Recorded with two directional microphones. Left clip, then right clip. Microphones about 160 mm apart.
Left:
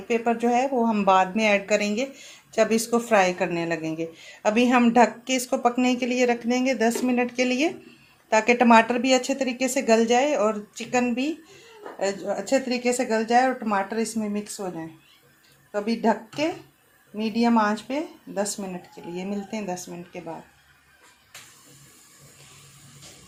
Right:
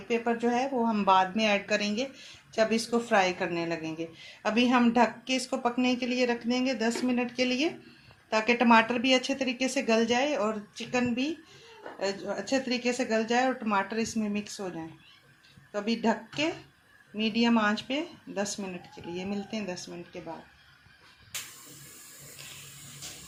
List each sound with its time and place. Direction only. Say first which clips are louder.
0.8 s speech: left 2 dB; 90° left; by 20.0 s 55° left (ahead or behind)